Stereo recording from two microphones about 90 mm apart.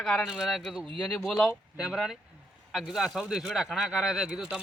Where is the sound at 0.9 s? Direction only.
15° left (ahead or behind).